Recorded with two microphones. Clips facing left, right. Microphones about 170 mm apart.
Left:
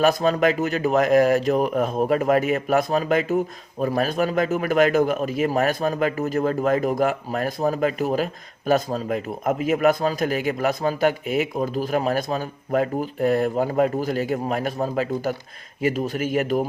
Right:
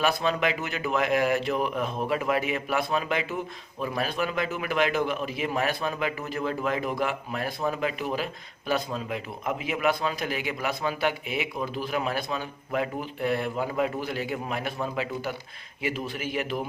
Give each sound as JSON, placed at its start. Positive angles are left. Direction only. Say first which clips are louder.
{"t": 0.0, "sound": "speech", "louder": "left 7 dB", "side_deg": 40}